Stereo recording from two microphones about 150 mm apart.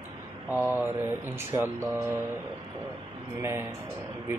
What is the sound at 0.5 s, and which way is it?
Speech, 10° right (ahead or behind).